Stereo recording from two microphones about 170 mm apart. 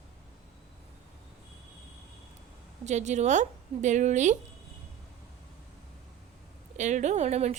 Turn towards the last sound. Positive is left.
turn(degrees=-40)  # may be behind; listen again after turning